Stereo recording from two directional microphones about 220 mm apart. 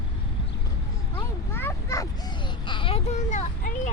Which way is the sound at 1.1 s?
10° left (ahead or behind).